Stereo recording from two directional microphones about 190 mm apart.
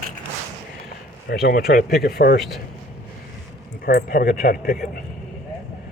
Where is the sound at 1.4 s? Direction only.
55° left (ahead or behind).